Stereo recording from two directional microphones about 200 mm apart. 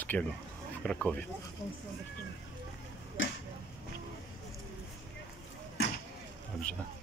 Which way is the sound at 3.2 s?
75° left (ahead or behind).